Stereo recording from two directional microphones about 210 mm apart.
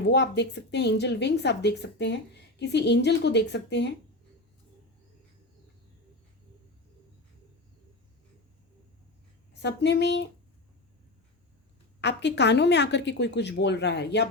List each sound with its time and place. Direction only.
0.0 s a woman's voice: 55° left (ahead or behind)
9.5 s a woman's voice: 55° left (ahead or behind)
11.9 s speech: 55° left (ahead or behind)